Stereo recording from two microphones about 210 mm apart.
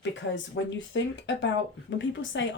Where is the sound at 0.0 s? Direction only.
60° left (ahead or behind).